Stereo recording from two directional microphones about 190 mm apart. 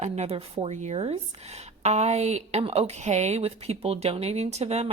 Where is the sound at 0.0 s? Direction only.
35° right (ahead or behind).